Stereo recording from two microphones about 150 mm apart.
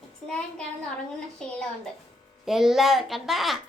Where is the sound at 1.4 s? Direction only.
5° left (ahead or behind).